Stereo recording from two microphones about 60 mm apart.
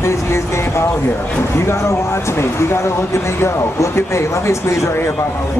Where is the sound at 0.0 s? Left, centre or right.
Left.